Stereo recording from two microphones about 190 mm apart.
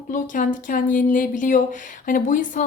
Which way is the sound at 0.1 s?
45° left (ahead or behind).